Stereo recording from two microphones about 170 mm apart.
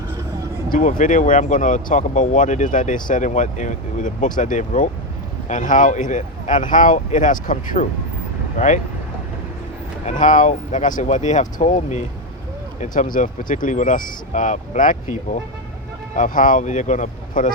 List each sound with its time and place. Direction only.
0.7 s speech: 50° left (ahead or behind)
10.1 s speech: 50° left (ahead or behind)